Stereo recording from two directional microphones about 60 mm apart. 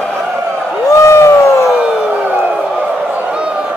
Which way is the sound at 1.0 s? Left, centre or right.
Left.